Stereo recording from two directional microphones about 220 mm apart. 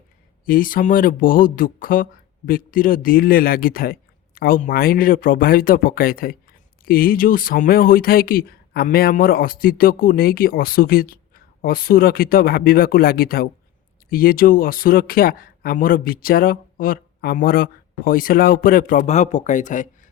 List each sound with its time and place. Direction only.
0.4 s speech: 40° left (ahead or behind)